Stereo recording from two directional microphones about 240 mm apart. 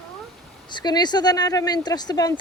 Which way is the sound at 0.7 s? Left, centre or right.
Centre.